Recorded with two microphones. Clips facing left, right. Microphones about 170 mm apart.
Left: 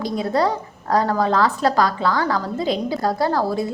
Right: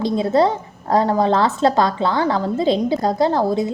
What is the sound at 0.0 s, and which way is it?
A woman's voice, 25° right (ahead or behind).